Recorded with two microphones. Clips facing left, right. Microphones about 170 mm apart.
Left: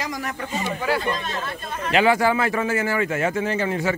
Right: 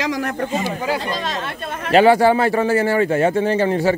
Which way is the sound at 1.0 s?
90° right.